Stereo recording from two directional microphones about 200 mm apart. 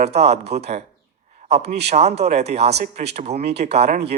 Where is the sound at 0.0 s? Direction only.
30° right (ahead or behind).